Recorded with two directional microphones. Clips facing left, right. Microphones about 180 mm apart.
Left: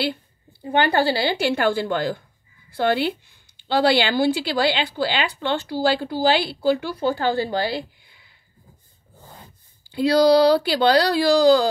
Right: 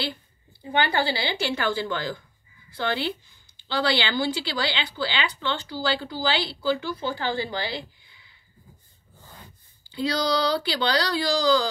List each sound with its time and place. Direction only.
0.0 s a sound: 55° left (ahead or behind)
0.6 s a woman's voice: 50° left (ahead or behind)
9.8 s a woman's voice: 55° left (ahead or behind)